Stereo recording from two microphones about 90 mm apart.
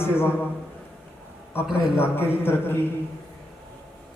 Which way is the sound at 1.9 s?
25° left (ahead or behind).